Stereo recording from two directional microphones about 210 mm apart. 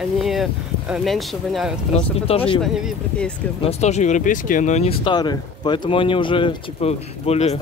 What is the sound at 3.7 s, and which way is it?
Speech, 30° left (ahead or behind).